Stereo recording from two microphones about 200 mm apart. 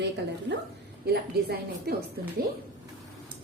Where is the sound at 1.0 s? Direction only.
50° right (ahead or behind).